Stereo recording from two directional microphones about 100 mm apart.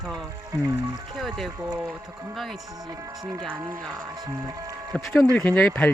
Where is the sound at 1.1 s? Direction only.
Centre (ahead or behind).